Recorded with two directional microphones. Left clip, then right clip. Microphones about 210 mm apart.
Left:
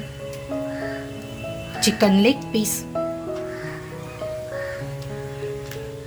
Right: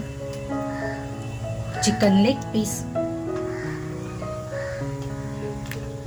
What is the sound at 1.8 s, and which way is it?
Speech, 30° left (ahead or behind).